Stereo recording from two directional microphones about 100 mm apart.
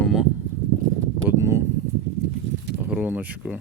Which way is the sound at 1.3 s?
25° right (ahead or behind).